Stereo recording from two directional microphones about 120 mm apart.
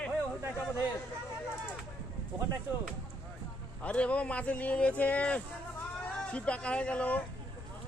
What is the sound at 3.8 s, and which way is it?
Speech, 10° left (ahead or behind).